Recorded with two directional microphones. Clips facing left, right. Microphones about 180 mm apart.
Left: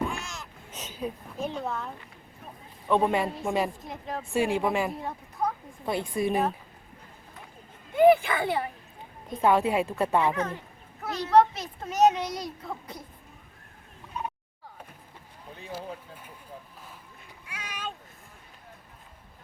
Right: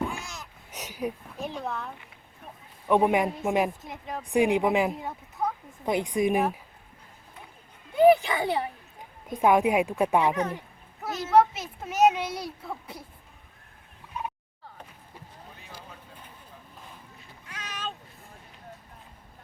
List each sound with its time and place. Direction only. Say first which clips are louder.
0.2 s a sound: left 1 dB; 15° right (ahead or behind)
1.4 s speech: left 3 dB; centre (ahead or behind)
2.9 s a woman's voice: right 2 dB; 15° right (ahead or behind)
3.8 s speech: left 1 dB; centre (ahead or behind)
4.3 s a woman's voice: right 3 dB; 15° right (ahead or behind)
5.0 s speech: left 1 dB; centre (ahead or behind)
5.8 s a woman's voice: right 3 dB; 20° right (ahead or behind)
8.1 s a woman's voice: even; 15° right (ahead or behind)
11.1 s a child's voice: even; 5° right (ahead or behind)
15.7 s a sound: left 11 dB; 10° left (ahead or behind)
17.5 s a sound: right 1 dB; 10° left (ahead or behind)